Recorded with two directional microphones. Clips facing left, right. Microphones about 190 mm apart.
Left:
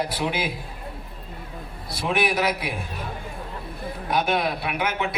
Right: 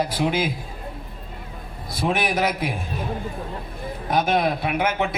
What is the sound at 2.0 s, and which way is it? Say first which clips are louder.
Speech: right 1 dB; 45° right (ahead or behind).